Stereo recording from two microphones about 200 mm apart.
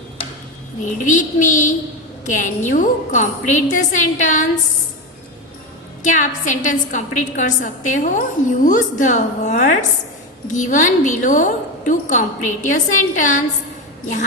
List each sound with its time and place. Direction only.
1.0 s a woman's voice: 40° left (ahead or behind)
6.0 s a woman's voice: 40° left (ahead or behind)